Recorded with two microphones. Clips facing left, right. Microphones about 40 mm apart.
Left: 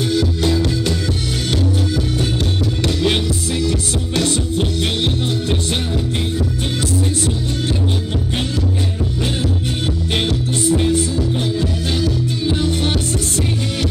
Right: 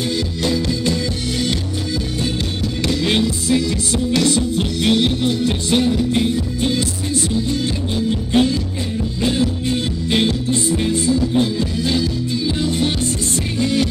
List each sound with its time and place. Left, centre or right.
0.4 s music: left
3.0 s music: centre
3.5 s music: left
4.4 s music: centre
5.8 s music: left
8.1 s music: centre
11.3 s music: left